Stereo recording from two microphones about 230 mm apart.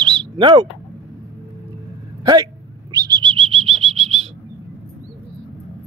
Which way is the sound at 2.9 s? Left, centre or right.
Centre.